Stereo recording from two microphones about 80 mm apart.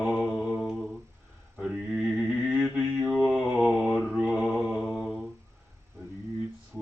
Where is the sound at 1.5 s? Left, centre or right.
Centre.